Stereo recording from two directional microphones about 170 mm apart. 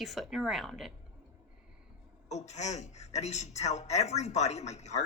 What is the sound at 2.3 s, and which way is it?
A woman's voice, 40° left (ahead or behind).